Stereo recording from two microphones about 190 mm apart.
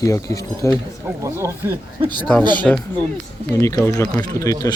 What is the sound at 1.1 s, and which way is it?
Speech, 15° right (ahead or behind).